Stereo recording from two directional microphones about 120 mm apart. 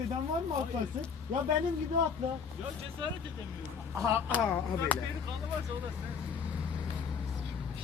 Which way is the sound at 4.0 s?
25° right (ahead or behind).